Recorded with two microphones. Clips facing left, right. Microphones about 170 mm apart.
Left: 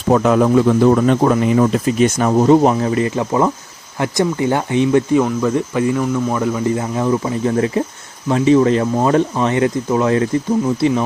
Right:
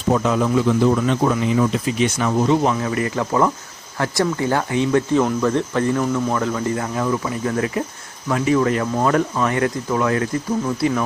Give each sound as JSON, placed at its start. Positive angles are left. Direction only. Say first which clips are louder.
{"t": 0.1, "sound": "speech", "louder": "left 5 dB", "side_deg": 60}
{"t": 2.9, "sound": "speech", "louder": "left 4 dB", "side_deg": 20}
{"t": 5.2, "sound": "speech", "louder": "left 2 dB", "side_deg": 5}